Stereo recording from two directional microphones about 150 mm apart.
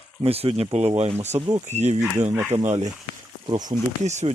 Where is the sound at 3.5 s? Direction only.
25° right (ahead or behind).